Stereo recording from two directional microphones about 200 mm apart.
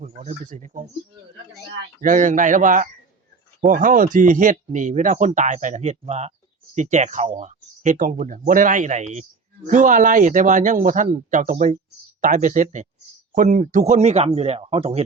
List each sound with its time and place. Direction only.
0.0 s speech: 35° right (ahead or behind)
2.0 s speech: 40° right (ahead or behind)